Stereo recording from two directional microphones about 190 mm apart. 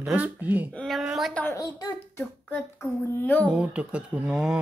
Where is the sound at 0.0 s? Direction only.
10° right (ahead or behind); by 1.7 s 10° left (ahead or behind).